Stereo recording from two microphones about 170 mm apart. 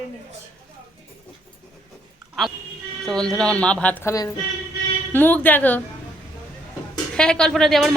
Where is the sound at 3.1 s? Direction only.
5° left (ahead or behind).